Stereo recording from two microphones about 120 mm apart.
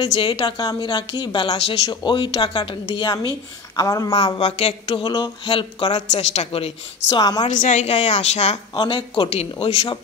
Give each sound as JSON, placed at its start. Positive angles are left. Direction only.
{"t": 0.0, "sound": "a woman's voice", "side_deg": 40}
{"t": 4.4, "sound": "speech", "side_deg": 60}
{"t": 4.9, "sound": "a woman's voice", "side_deg": 35}
{"t": 5.9, "sound": "a woman's voice", "side_deg": 70}
{"t": 6.5, "sound": "speech", "side_deg": 50}
{"t": 7.2, "sound": "a woman's voice", "side_deg": 35}
{"t": 7.4, "sound": "a woman's voice", "side_deg": 85}
{"t": 8.7, "sound": "a woman's voice", "side_deg": 45}
{"t": 9.3, "sound": "speech", "side_deg": 60}